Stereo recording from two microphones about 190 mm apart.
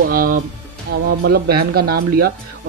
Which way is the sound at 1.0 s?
55° right (ahead or behind).